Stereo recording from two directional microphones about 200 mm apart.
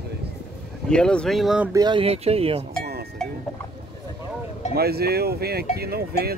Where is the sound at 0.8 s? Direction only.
5° left (ahead or behind).